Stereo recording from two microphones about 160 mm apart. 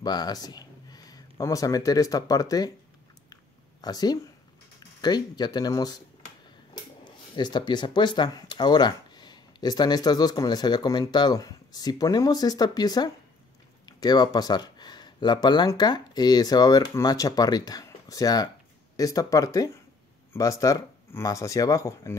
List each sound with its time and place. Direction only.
0.0 s speech: 25° left (ahead or behind)
3.8 s speech: 25° left (ahead or behind)